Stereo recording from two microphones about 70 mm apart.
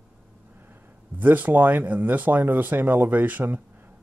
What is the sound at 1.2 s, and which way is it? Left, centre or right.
Speech, right.